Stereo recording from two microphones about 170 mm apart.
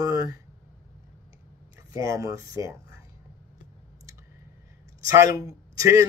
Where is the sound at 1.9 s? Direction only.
20° right (ahead or behind).